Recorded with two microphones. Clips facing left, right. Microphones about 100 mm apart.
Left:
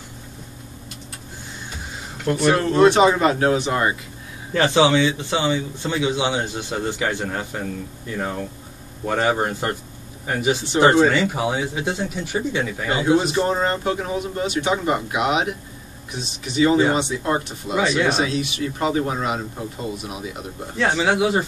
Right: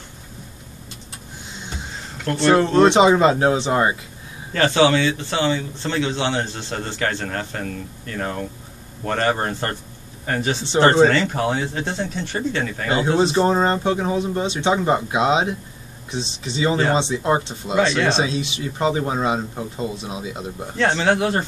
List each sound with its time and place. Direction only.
2.3 s a man's voice: 15° left (ahead or behind)
2.9 s speech: 20° right (ahead or behind)
4.6 s a man's voice: 15° left (ahead or behind)
13.2 s speech: 25° right (ahead or behind)
17.7 s a man's voice: 15° left (ahead or behind)
18.1 s speech: 25° right (ahead or behind)
20.7 s speech: 5° left (ahead or behind)